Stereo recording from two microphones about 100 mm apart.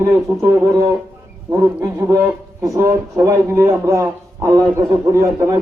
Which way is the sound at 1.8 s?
30° right (ahead or behind).